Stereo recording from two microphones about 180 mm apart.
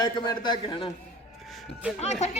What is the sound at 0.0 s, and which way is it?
Speech, 25° left (ahead or behind).